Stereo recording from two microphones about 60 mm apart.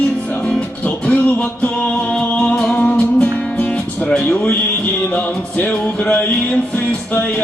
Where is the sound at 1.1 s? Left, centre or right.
Left.